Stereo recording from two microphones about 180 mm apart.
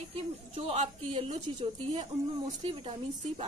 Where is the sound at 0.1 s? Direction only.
35° right (ahead or behind).